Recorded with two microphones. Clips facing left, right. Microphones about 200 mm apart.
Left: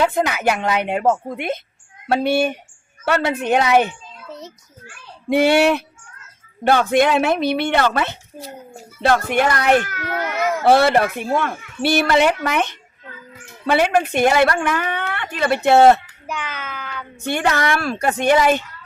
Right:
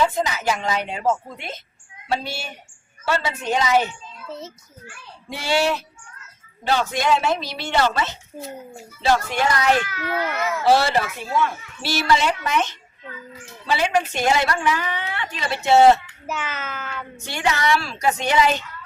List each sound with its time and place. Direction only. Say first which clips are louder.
0.0 s speech: left 3 dB; 60° left (ahead or behind)
5.3 s speech: left 7 dB; 60° left (ahead or behind)
10.6 s speech: left 4 dB; 60° left (ahead or behind)
16.2 s a child's voice: even; 5° right (ahead or behind)
17.2 s speech: left 3 dB; 55° left (ahead or behind)